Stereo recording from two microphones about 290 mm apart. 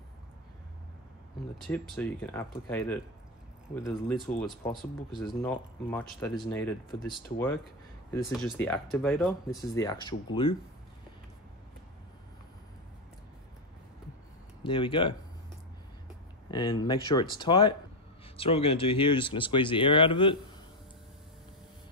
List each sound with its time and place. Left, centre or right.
1.7 s speech: centre
4.4 s speech: centre
9.6 s speech: centre
14.6 s speech: centre
16.4 s speech: centre